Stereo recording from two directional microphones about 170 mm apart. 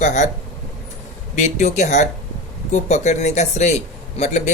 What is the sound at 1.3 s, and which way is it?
A man's voice, 45° left (ahead or behind).